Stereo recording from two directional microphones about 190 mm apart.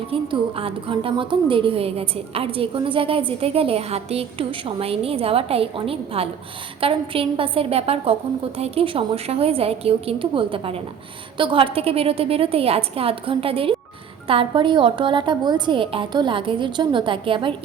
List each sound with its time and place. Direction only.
0.1 s a woman's voice: 30° right (ahead or behind)